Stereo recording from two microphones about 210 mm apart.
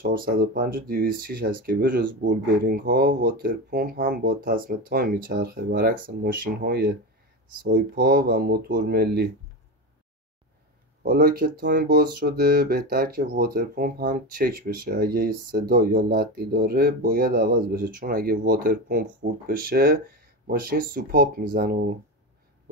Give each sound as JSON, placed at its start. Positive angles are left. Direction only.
{"t": 0.0, "sound": "speech", "side_deg": -45}
{"t": 11.0, "sound": "speech", "side_deg": -45}